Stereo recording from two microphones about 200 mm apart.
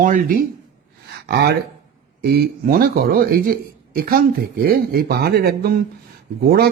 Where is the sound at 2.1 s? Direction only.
50° right (ahead or behind).